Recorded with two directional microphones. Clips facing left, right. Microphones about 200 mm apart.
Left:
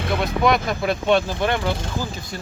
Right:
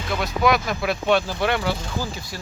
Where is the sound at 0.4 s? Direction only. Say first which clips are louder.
Even; centre (ahead or behind).